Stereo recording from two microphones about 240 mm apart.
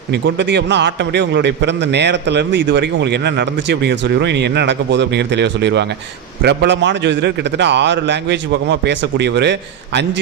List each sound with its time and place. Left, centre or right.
0.1 s a man's voice: right